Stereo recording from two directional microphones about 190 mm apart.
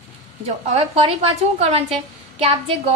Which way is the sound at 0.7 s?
30° right (ahead or behind).